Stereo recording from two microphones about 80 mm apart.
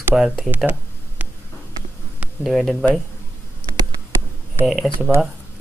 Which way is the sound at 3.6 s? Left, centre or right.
Left.